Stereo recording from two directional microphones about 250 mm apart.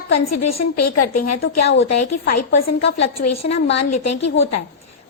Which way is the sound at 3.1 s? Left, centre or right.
Left.